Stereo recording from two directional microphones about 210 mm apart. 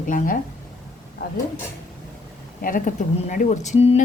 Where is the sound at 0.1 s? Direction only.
40° left (ahead or behind).